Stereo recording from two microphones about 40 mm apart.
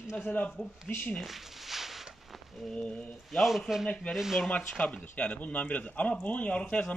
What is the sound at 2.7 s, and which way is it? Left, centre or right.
Speech, left.